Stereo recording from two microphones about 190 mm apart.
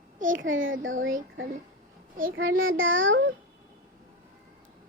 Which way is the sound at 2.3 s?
90° right.